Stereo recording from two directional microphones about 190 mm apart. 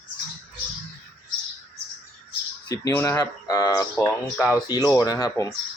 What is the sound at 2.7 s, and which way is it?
Speech, 15° left (ahead or behind).